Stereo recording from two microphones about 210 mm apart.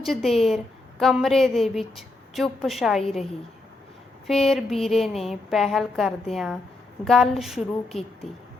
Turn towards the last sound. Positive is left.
turn(degrees=0)  # may be behind; listen again after turning